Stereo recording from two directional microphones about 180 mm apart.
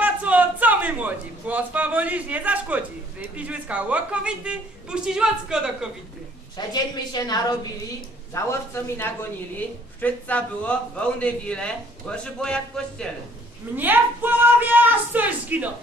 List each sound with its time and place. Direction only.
0.0 s a man's voice: 10° right (ahead or behind)
6.7 s a woman's voice: 20° left (ahead or behind)
8.4 s a man's voice: 15° left (ahead or behind)
13.7 s speech: 10° right (ahead or behind)